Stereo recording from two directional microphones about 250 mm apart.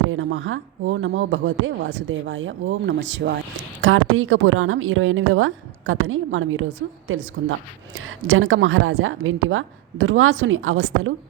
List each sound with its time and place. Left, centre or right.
0.1 s speech: right